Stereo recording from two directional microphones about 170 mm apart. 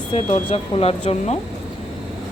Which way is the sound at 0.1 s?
40° left (ahead or behind).